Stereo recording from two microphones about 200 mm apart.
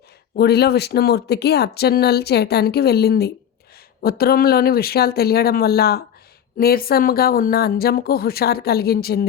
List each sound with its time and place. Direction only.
0.3 s speech: 55° left (ahead or behind)